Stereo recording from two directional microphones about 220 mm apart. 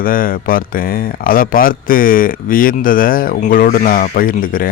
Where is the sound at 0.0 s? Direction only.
40° left (ahead or behind).